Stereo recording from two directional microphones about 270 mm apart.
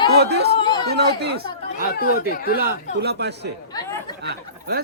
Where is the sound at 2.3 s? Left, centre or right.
Left.